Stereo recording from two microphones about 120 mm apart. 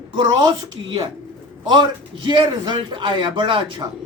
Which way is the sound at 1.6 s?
40° right (ahead or behind).